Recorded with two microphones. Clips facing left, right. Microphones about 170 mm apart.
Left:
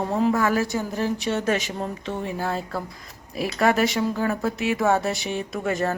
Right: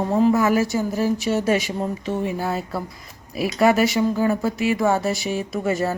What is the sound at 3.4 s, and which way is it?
Speech, 5° right (ahead or behind).